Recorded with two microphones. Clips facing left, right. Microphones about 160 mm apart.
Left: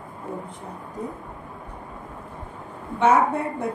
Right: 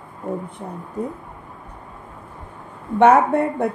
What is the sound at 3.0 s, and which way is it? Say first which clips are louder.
Speech: right 5 dB; 60° right (ahead or behind).